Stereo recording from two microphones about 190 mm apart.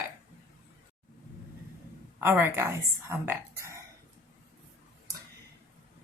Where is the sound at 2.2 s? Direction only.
10° right (ahead or behind).